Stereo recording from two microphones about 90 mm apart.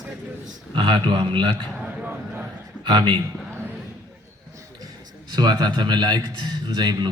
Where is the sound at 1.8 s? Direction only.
20° right (ahead or behind).